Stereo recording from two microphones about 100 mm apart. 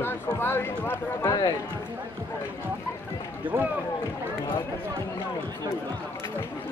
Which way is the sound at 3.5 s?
25° right (ahead or behind).